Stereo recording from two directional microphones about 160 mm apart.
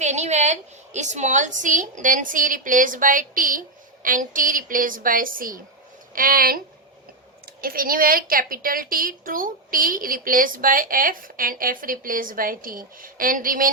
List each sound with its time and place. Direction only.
0.0 s a woman's voice: 45° right (ahead or behind)